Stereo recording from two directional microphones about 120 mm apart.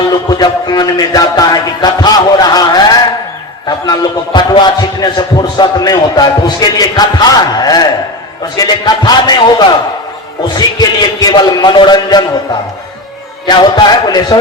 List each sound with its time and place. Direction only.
0.1 s speech: 35° left (ahead or behind)
13.5 s speech: 35° left (ahead or behind)